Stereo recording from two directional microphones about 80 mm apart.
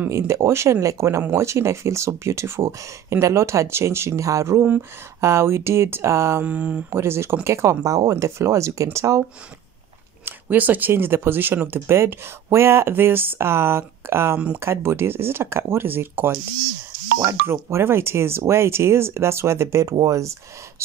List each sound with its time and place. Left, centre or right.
0.3 s speech: right
6.4 s speech: centre
6.9 s speech: right
7.8 s speech: right
10.2 s speech: right